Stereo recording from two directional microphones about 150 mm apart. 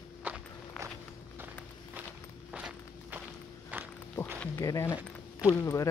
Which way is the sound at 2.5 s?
5° right (ahead or behind).